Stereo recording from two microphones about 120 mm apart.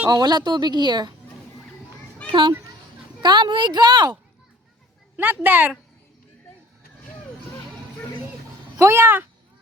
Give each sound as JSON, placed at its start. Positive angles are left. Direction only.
{"t": 0.1, "sound": "a woman's voice", "side_deg": -35}
{"t": 2.2, "sound": "a woman's voice", "side_deg": -45}
{"t": 5.1, "sound": "a woman's voice", "side_deg": -15}
{"t": 8.8, "sound": "speech", "side_deg": -20}